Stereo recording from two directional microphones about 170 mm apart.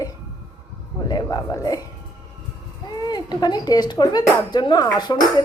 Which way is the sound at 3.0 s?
25° left (ahead or behind).